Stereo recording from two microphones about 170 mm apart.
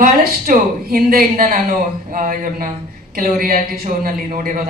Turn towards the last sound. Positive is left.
turn(degrees=-55)  # may be behind; listen again after turning